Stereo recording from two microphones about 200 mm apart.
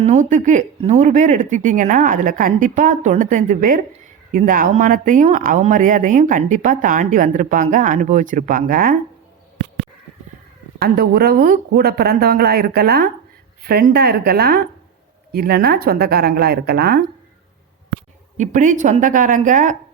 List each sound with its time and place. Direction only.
0.0 s speech: 35° right (ahead or behind)
10.8 s speech: 50° right (ahead or behind)
18.3 s speech: 40° right (ahead or behind)